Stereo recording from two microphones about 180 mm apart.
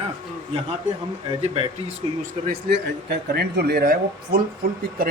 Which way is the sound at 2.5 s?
65° right (ahead or behind).